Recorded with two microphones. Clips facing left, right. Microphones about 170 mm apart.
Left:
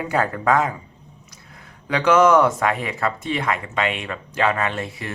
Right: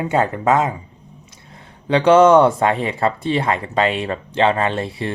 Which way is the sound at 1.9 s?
30° right (ahead or behind).